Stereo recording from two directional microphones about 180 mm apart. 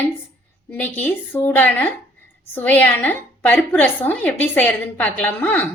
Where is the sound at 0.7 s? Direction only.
10° left (ahead or behind).